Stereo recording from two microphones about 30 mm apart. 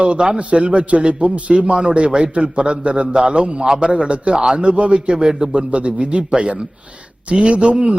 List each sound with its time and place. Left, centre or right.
0.0 s a man's voice: right
3.6 s a man's voice: right
3.9 s a man's voice: right
5.1 s a man's voice: right
5.5 s a man's voice: right
7.3 s a man's voice: right